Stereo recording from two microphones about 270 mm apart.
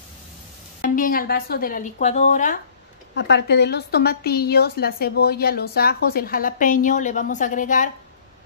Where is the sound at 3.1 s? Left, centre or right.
Left.